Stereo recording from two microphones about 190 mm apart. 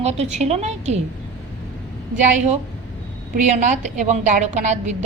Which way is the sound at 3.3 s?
40° right (ahead or behind).